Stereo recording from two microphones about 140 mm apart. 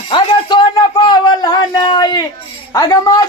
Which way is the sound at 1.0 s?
30° left (ahead or behind).